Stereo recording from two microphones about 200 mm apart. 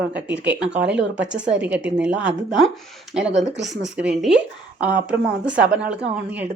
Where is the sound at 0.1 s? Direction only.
5° right (ahead or behind).